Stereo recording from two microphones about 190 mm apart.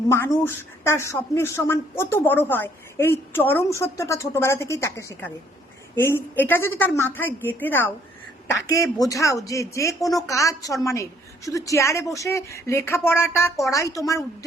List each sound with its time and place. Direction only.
0.1 s speech: 15° left (ahead or behind)